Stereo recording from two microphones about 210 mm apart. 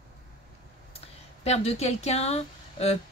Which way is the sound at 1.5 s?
30° left (ahead or behind).